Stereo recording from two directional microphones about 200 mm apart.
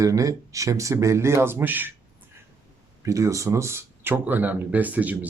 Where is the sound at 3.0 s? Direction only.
15° right (ahead or behind).